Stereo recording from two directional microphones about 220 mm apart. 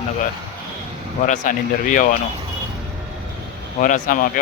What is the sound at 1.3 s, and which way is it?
Speech, 35° left (ahead or behind).